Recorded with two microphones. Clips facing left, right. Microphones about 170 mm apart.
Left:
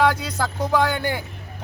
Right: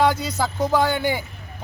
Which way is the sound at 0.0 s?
10° right (ahead or behind).